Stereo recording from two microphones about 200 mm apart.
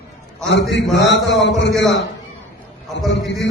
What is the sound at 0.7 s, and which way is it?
A man's voice, 60° left (ahead or behind).